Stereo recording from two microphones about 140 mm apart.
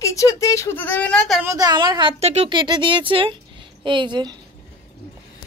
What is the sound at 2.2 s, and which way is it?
Speech, 50° right (ahead or behind).